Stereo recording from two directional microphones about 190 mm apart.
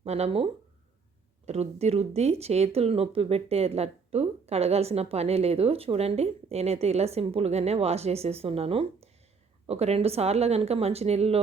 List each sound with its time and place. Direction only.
0.0 s speech: 35° right (ahead or behind)